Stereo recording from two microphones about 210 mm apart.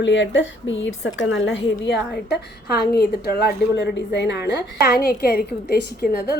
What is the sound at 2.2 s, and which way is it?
A woman's voice, 50° left (ahead or behind).